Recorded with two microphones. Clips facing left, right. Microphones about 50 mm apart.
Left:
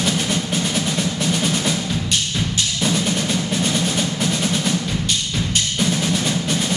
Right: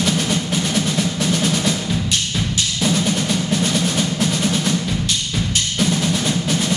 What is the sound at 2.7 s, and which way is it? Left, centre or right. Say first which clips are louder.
Percussion: right 2 dB; centre.